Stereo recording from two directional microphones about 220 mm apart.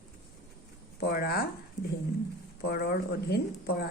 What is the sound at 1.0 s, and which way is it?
Speech, 45° left (ahead or behind).